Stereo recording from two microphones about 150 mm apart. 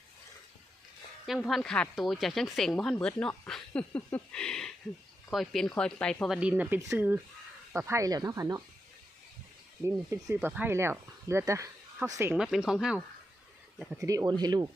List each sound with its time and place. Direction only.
1.3 s speech: centre (ahead or behind); by 8.6 s 20° right (ahead or behind)
10.1 s speech: 15° right (ahead or behind)
12.3 s speech: 5° right (ahead or behind)
14.0 s speech: 20° right (ahead or behind)